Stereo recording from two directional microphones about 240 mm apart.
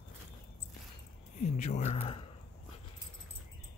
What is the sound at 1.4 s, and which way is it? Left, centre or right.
Speech, left.